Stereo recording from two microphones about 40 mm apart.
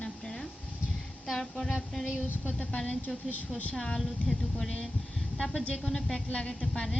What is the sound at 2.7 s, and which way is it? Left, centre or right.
A woman's voice, left.